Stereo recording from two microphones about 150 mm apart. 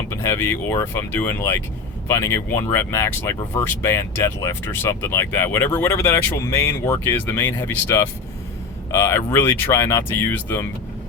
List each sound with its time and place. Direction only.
0.1 s speech: 20° left (ahead or behind)